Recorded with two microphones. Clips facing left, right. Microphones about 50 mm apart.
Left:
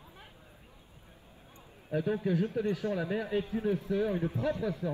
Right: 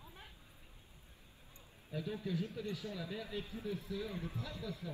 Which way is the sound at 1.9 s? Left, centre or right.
Left.